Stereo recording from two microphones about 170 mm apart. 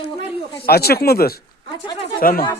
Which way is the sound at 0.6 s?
65° left (ahead or behind).